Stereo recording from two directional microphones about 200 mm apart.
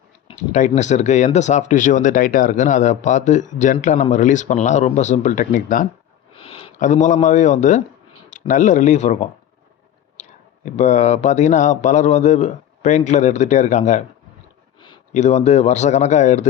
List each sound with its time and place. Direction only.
0.3 s speech: 35° left (ahead or behind)
6.3 s speech: 30° left (ahead or behind)
10.8 s speech: 35° left (ahead or behind)
15.1 s speech: 35° left (ahead or behind)